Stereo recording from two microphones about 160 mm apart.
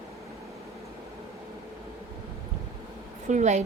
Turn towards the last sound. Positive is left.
turn(degrees=-45)  # may be behind; listen again after turning